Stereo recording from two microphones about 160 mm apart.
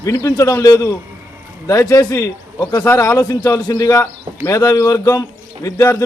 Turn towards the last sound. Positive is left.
turn(degrees=20)  # may be behind; listen again after turning